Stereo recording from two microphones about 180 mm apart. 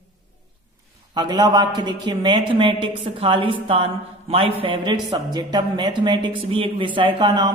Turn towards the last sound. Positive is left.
turn(degrees=-25)  # may be behind; listen again after turning